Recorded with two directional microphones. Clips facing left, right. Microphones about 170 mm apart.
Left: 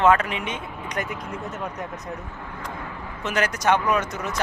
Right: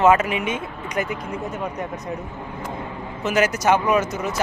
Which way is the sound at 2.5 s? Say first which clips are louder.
Right 3 dB; 20° right (ahead or behind).